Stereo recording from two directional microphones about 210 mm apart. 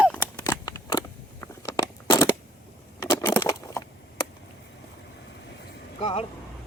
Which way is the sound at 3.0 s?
15° left (ahead or behind).